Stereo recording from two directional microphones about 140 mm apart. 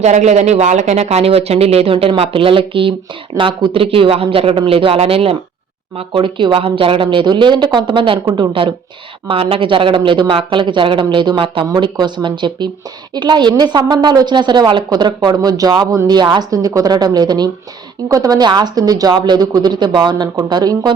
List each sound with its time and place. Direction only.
0.0 s speech: 55° right (ahead or behind); by 20.9 s 30° right (ahead or behind)